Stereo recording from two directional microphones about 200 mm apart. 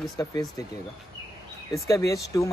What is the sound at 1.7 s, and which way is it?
Speech, 15° left (ahead or behind).